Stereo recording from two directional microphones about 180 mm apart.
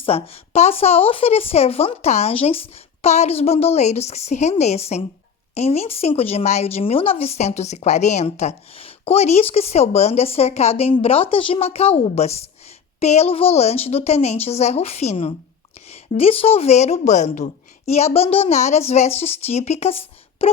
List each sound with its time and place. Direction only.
0.0 s speech: 35° left (ahead or behind)